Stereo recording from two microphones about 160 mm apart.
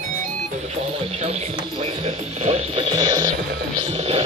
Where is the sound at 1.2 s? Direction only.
40° right (ahead or behind).